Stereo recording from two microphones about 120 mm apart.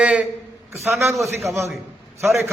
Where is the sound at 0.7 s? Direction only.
20° right (ahead or behind).